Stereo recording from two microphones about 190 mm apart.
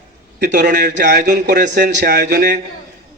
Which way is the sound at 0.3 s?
65° right (ahead or behind).